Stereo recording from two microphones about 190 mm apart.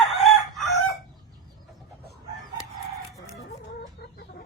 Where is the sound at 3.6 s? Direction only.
55° left (ahead or behind).